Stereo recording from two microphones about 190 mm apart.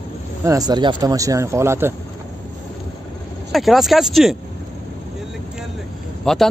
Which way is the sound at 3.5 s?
Centre (ahead or behind).